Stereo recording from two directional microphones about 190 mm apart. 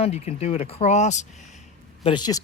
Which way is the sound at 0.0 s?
30° left (ahead or behind).